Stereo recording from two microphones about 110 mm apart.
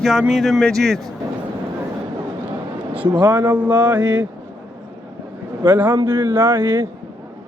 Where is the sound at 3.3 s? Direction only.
20° right (ahead or behind).